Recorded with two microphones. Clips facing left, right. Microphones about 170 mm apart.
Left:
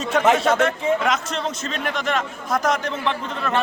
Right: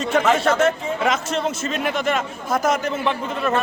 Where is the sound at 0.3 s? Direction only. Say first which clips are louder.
Right 1 dB; centre (ahead or behind).